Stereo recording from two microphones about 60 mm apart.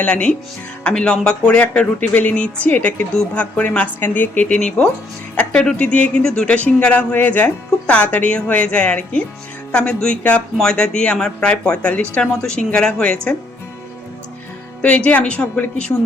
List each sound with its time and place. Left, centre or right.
0.0 s speech: centre
6.8 s speech: left
14.8 s speech: left